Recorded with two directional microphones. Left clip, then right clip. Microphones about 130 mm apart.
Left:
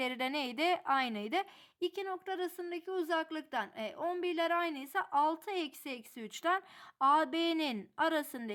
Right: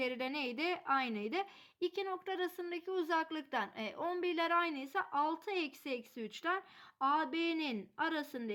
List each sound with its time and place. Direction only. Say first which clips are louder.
0.0 s speech: left 2 dB; 45° left (ahead or behind)
1.8 s a woman's voice: left 1 dB; 25° left (ahead or behind); by 8.5 s 45° left (ahead or behind)